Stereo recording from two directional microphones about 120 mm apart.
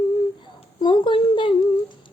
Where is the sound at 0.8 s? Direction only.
45° left (ahead or behind).